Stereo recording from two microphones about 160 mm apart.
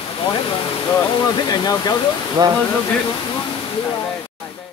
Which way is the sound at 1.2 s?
25° left (ahead or behind).